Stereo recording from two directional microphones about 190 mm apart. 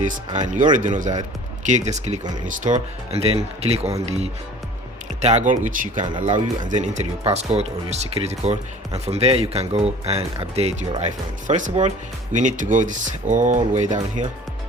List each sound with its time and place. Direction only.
0.3 s speech: 40° right (ahead or behind)
5.2 s speech: 35° right (ahead or behind)